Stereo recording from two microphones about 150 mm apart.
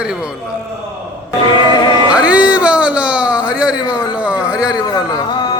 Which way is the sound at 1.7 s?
30° left (ahead or behind).